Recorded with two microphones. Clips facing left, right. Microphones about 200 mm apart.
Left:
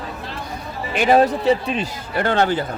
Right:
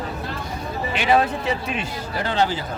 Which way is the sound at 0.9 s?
45° left (ahead or behind).